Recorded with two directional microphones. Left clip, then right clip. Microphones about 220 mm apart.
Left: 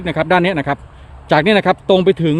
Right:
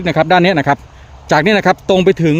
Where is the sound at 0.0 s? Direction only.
20° right (ahead or behind).